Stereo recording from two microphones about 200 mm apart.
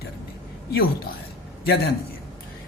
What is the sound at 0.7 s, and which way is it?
Speech, 50° left (ahead or behind).